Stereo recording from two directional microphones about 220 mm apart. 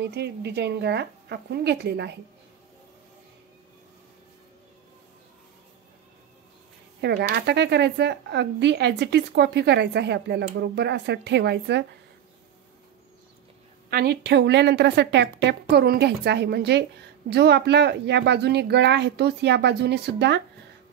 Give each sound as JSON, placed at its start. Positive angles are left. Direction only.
{"t": 0.0, "sound": "a woman's voice", "side_deg": -50}
{"t": 7.0, "sound": "a woman's voice", "side_deg": -50}
{"t": 13.8, "sound": "a woman's voice", "side_deg": -45}